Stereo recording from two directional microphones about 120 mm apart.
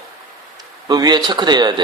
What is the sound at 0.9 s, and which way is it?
Speech, 35° right (ahead or behind).